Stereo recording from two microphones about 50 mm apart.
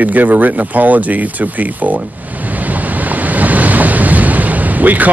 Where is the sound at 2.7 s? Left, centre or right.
Right.